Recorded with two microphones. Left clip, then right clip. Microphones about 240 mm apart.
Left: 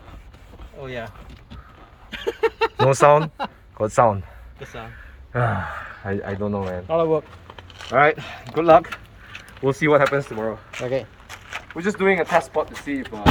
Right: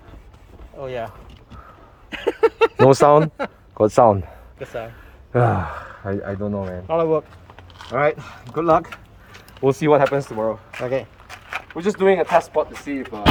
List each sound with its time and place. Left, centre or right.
0.8 s speech: centre
2.2 s a sound: centre
2.8 s speech: right
5.3 s speech: right
6.7 s speech: centre
7.9 s speech: centre
9.6 s speech: right
10.8 s speech: centre
11.7 s speech: right